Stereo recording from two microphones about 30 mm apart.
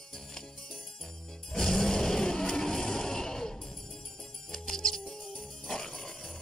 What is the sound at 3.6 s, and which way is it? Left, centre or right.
Music, centre.